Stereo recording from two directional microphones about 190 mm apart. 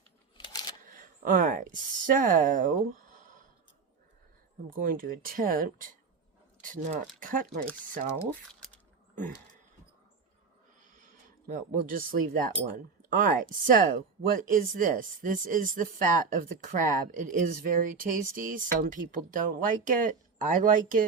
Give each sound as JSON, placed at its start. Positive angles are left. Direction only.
{"t": 0.9, "sound": "speech", "side_deg": -45}
{"t": 4.7, "sound": "speech", "side_deg": -50}
{"t": 10.9, "sound": "speech", "side_deg": -40}